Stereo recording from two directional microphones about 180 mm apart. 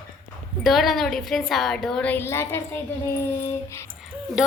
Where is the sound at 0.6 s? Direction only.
Centre (ahead or behind).